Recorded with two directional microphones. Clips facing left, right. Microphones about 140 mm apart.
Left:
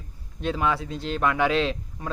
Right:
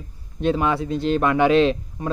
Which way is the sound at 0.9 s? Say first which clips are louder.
Right 9 dB; 60° right (ahead or behind).